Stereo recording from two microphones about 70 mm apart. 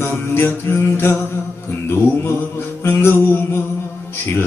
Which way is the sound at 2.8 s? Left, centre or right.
Left.